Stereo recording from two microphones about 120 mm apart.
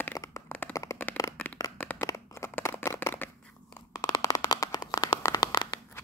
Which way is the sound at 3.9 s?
30° left (ahead or behind).